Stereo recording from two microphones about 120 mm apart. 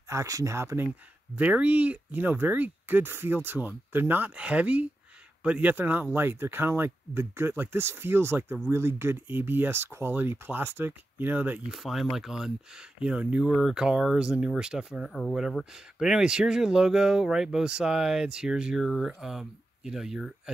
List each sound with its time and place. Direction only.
0.1 s speech: 25° right (ahead or behind)
1.3 s speech: 10° right (ahead or behind)
11.7 s speech: centre (ahead or behind)